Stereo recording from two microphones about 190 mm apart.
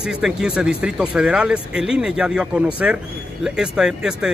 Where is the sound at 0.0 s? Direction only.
5° right (ahead or behind).